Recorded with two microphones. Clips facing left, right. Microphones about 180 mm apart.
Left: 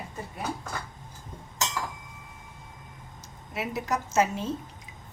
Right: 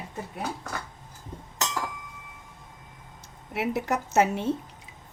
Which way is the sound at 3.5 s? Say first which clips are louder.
Right 3 dB; 65° right (ahead or behind).